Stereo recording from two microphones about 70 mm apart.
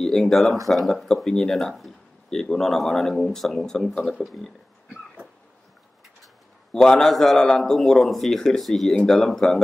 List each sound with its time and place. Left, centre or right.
0.0 s speech: centre
6.7 s speech: centre